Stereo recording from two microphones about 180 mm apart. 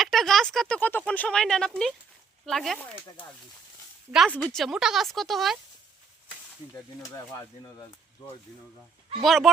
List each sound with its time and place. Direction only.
0.0 s speech: centre (ahead or behind)
4.3 s speech: 5° left (ahead or behind)
7.6 s speech: 20° left (ahead or behind)
9.2 s speech: centre (ahead or behind)